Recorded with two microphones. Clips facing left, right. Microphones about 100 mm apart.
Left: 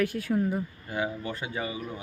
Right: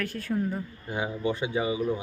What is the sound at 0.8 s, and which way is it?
Speech, 20° right (ahead or behind).